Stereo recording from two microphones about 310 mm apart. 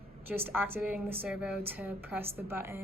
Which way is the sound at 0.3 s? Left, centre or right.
Centre.